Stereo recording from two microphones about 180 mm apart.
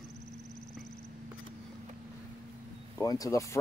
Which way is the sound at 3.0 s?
20° left (ahead or behind).